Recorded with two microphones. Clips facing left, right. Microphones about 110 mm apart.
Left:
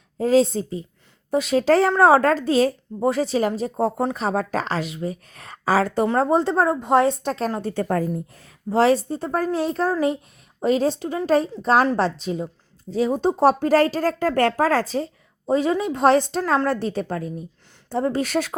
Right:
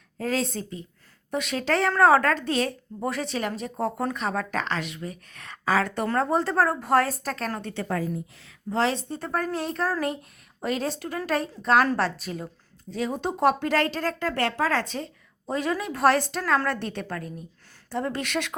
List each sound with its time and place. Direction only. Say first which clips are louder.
0.2 s speech: left 10 dB; 30° left (ahead or behind)
7.6 s a woman's voice: left 6 dB; 45° left (ahead or behind)
9.0 s speech: left 5 dB; 30° left (ahead or behind)